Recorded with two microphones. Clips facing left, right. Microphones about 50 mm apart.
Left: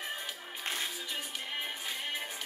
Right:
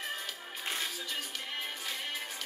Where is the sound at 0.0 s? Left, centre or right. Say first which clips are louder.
Even; centre.